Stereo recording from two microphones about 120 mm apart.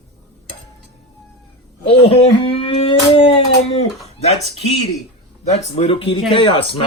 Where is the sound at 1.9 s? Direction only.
50° left (ahead or behind).